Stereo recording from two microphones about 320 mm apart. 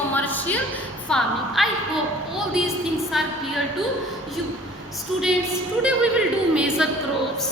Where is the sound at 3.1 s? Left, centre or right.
Centre.